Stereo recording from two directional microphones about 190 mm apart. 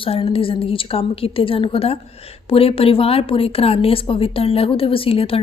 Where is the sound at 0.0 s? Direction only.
30° left (ahead or behind).